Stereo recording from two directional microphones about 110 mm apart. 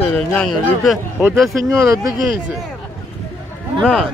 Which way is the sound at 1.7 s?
30° right (ahead or behind).